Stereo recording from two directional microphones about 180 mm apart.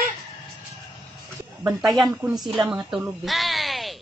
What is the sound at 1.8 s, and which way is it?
Speech, centre (ahead or behind).